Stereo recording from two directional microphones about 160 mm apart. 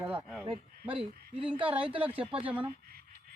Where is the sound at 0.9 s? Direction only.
35° right (ahead or behind).